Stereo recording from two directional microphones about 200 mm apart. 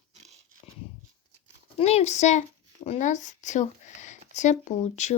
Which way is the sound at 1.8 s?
30° left (ahead or behind).